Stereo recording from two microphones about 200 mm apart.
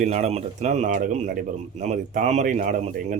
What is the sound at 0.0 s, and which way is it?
A man's voice, 35° right (ahead or behind).